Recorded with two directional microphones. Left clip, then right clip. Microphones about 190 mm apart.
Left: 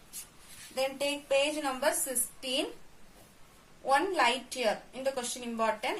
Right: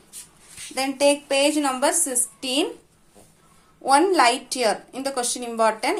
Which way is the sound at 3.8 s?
35° right (ahead or behind).